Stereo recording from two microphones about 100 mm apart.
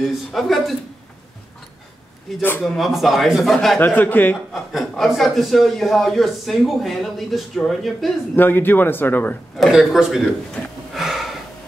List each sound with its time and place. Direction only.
0.0 s a man's voice: centre (ahead or behind)
2.6 s a man's voice: centre (ahead or behind)
3.8 s speech: 20° left (ahead or behind)
4.7 s a man's voice: centre (ahead or behind)
8.4 s speech: 20° left (ahead or behind)
9.6 s a sound: 5° right (ahead or behind)